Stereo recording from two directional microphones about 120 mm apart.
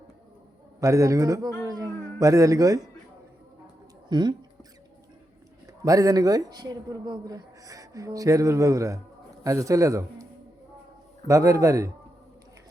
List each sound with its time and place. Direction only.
0.8 s speech: 25° right (ahead or behind)
1.6 s a sound: 30° right (ahead or behind)
4.1 s speech: 40° right (ahead or behind)
5.8 s speech: 30° right (ahead or behind)
11.3 s speech: 25° right (ahead or behind)